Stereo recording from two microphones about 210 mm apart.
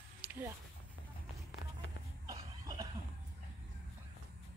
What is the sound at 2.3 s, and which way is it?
Cough, 20° right (ahead or behind).